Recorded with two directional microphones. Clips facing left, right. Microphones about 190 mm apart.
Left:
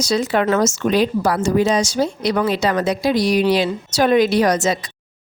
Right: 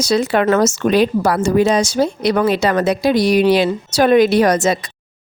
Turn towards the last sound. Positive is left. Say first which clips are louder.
# right 3 dB
turn(degrees=-55)  # may be behind; listen again after turning